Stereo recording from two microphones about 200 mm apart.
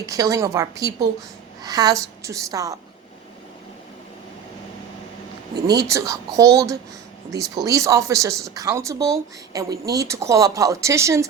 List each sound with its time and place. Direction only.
0.0 s speech: 15° right (ahead or behind)
5.7 s speech: 15° right (ahead or behind)